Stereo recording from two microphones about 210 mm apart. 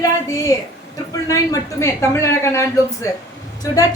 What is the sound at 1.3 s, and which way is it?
A woman's voice, 15° left (ahead or behind).